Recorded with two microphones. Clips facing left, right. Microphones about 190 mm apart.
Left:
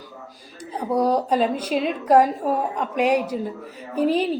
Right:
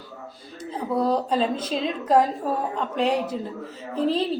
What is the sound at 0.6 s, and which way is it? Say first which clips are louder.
A woman's voice: left 3 dB; 15° left (ahead or behind).